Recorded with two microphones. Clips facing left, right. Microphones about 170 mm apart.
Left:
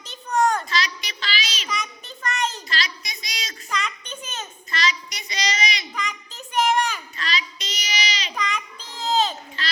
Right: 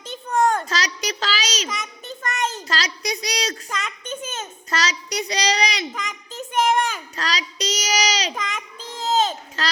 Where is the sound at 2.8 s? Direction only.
80° right.